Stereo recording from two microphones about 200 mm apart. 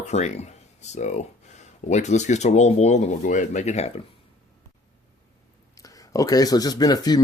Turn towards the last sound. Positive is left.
turn(degrees=20)  # may be behind; listen again after turning